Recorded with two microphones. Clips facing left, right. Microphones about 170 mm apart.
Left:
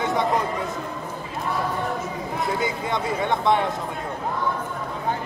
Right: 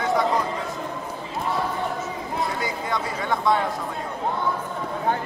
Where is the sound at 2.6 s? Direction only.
20° left (ahead or behind).